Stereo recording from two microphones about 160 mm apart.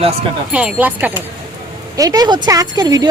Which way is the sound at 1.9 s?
20° right (ahead or behind).